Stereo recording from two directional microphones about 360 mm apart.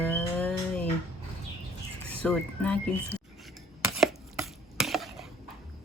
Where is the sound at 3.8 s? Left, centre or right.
Centre.